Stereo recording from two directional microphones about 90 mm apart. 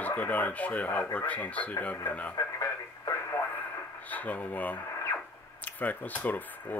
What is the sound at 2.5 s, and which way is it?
Radio, 35° left (ahead or behind).